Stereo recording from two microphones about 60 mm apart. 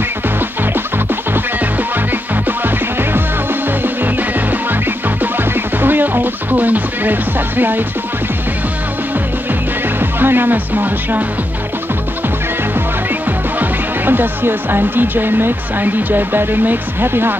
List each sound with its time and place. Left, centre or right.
2.4 s music: right
9.9 s speech: right
13.6 s speech: right